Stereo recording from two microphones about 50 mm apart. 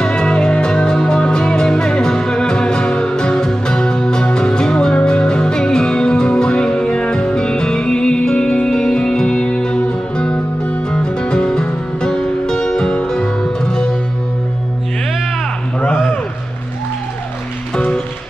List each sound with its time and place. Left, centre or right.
0.0 s music: centre